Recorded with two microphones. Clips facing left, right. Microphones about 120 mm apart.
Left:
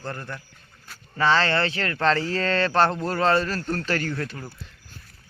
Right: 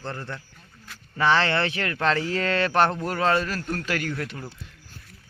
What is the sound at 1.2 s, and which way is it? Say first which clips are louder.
Speech: even; 15° right (ahead or behind).